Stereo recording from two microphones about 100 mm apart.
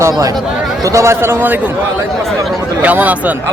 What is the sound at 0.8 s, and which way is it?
Speech, 30° right (ahead or behind).